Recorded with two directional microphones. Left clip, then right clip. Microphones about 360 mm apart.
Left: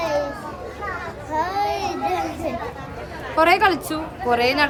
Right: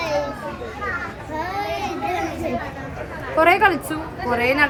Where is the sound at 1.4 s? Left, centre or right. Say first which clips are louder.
Left 3 dB; centre.